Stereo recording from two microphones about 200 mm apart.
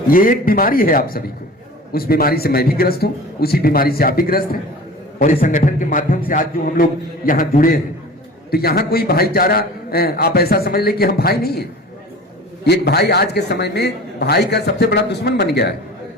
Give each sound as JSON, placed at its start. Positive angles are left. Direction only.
{"t": 0.1, "sound": "a man's voice", "side_deg": 45}